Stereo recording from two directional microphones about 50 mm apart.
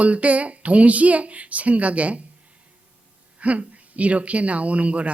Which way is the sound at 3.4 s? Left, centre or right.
Right.